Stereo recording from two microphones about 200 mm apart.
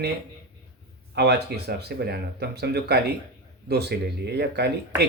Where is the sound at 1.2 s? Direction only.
55° right (ahead or behind).